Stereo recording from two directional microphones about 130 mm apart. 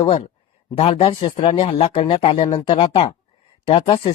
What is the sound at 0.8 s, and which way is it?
Speech, 50° left (ahead or behind).